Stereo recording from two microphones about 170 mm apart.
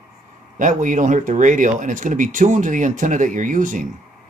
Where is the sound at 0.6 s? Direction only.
50° right (ahead or behind).